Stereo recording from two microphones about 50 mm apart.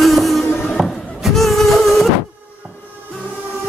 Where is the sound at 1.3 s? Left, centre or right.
Centre.